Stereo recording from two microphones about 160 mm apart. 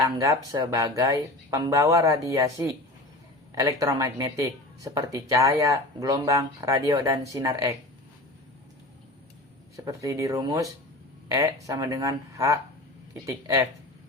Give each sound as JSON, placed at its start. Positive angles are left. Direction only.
{"t": 0.2, "sound": "speech", "side_deg": -20}
{"t": 9.7, "sound": "speech", "side_deg": -20}